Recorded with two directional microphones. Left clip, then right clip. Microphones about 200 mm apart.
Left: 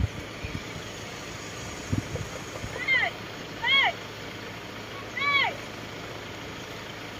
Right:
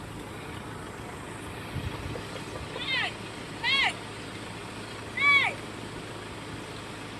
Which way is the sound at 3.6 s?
30° left (ahead or behind).